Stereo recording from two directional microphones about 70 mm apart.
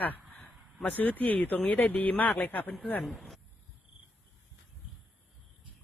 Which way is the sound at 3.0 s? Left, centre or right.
Centre.